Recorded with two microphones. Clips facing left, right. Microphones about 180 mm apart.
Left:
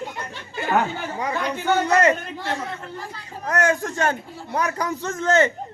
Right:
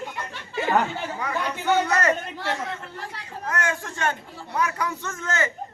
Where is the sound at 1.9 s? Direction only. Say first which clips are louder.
Left 5 dB; 25° left (ahead or behind).